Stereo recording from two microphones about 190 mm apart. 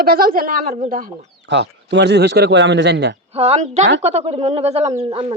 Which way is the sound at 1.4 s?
65° right (ahead or behind).